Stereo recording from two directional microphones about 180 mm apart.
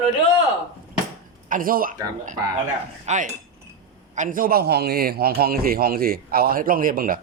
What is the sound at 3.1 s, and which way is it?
Cutlery, 40° right (ahead or behind).